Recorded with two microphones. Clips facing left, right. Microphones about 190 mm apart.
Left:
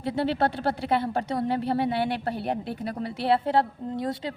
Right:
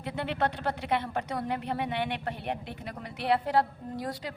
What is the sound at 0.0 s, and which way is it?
A woman's voice, 35° left (ahead or behind).